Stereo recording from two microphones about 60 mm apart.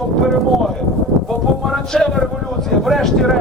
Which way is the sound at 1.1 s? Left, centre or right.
Centre.